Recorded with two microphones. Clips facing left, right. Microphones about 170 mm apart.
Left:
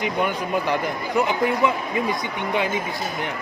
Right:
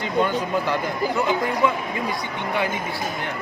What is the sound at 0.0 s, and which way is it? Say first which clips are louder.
Speech: right 2 dB; 15° left (ahead or behind).